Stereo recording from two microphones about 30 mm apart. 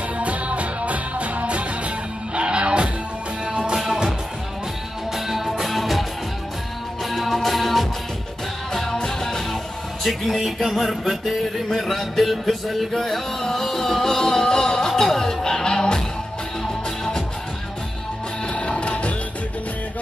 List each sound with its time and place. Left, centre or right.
0.2 s music: right
2.3 s music: right
3.4 s music: right
3.7 s music: centre
5.1 s music: centre
9.2 s music: centre
15.6 s music: left
18.5 s music: left